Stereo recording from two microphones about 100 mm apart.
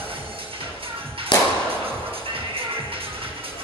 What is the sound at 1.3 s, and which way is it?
Thump, 45° left (ahead or behind).